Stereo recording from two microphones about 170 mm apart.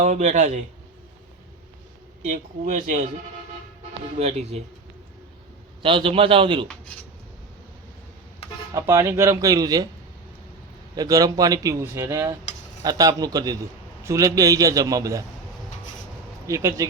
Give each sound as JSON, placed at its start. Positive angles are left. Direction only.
{"t": 0.0, "sound": "speech", "side_deg": -45}
{"t": 2.3, "sound": "speech", "side_deg": -45}
{"t": 4.2, "sound": "a man's voice", "side_deg": -40}
{"t": 5.8, "sound": "a man's voice", "side_deg": -30}
{"t": 8.7, "sound": "a man's voice", "side_deg": -20}
{"t": 10.9, "sound": "a man's voice", "side_deg": -20}
{"t": 16.5, "sound": "a man's voice", "side_deg": -20}